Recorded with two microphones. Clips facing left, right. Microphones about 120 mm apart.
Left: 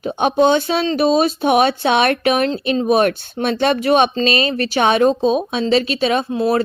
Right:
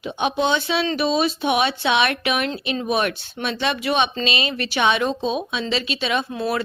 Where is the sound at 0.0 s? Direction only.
45° left (ahead or behind).